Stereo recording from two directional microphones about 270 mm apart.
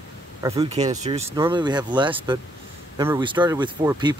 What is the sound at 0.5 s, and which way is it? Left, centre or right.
Speech, right.